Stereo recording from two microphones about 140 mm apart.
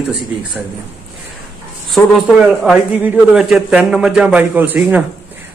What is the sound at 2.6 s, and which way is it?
A man's voice, 5° right (ahead or behind).